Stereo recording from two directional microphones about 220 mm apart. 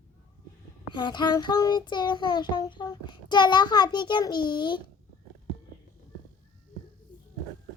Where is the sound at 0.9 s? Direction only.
20° left (ahead or behind).